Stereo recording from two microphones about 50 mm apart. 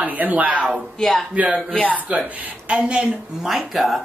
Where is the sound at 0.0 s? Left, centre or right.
Right.